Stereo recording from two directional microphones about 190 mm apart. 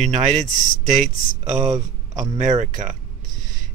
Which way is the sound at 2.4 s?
40° right (ahead or behind).